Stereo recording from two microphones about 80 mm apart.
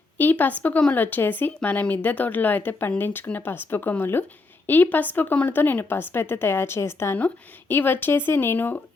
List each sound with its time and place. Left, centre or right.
0.2 s speech: left